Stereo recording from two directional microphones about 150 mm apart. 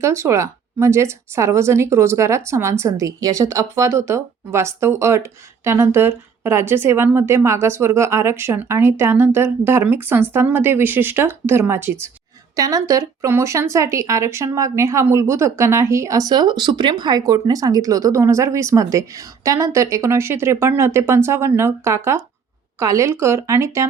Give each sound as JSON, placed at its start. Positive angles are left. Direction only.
{"t": 0.0, "sound": "a woman's voice", "side_deg": -20}